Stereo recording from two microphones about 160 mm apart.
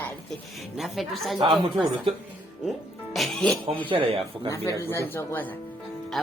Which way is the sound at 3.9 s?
35° right (ahead or behind).